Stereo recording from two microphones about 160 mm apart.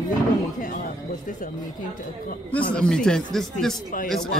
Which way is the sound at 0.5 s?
60° left (ahead or behind).